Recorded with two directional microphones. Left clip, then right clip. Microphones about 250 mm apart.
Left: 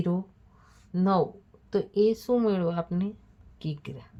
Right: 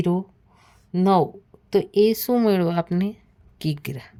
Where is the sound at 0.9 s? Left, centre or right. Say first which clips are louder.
Right 7 dB; right.